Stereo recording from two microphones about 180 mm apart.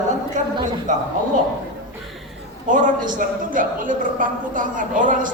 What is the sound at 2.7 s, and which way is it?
A woman's voice, 45° right (ahead or behind).